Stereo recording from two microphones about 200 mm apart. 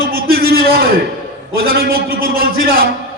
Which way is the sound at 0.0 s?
50° right (ahead or behind).